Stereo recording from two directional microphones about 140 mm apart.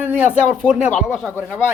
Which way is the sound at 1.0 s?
Centre (ahead or behind).